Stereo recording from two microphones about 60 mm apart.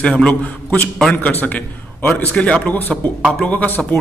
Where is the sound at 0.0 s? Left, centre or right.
Left.